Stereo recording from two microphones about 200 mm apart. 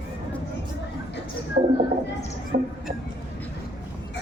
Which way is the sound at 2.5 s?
50° right (ahead or behind).